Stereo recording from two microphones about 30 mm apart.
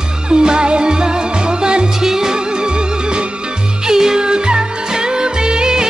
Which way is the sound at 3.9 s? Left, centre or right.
Centre.